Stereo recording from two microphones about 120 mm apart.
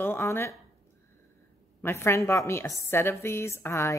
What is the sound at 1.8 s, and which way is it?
A woman's voice, 20° left (ahead or behind).